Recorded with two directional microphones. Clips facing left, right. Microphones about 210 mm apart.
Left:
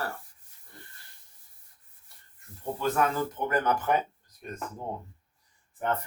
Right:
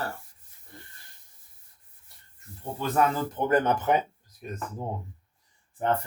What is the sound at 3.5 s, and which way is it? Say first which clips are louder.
Speech: right 5 dB; 25° right (ahead or behind).